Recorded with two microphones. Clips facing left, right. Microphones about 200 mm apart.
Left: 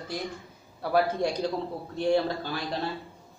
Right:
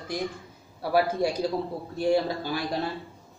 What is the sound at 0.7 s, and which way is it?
A man's voice, 5° right (ahead or behind).